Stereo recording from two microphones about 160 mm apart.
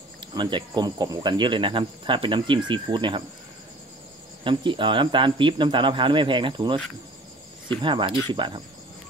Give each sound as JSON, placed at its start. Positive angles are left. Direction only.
{"t": 0.2, "sound": "speech", "side_deg": -30}
{"t": 4.5, "sound": "speech", "side_deg": -30}